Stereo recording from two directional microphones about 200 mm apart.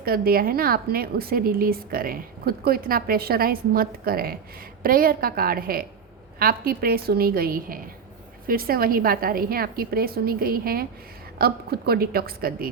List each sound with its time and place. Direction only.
0.0 s a woman's voice: 45° right (ahead or behind)